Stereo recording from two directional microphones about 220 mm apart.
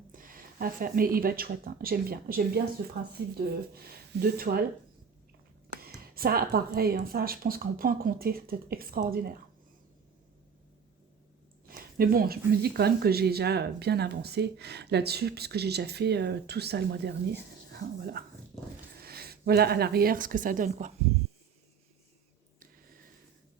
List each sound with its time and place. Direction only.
0.1 s speech: 40° right (ahead or behind)
5.8 s speech: 45° right (ahead or behind)
11.7 s a woman's voice: 40° right (ahead or behind)
22.6 s a sound: 40° right (ahead or behind)